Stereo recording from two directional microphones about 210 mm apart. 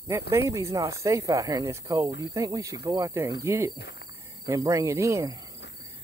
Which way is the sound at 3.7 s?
50° left (ahead or behind).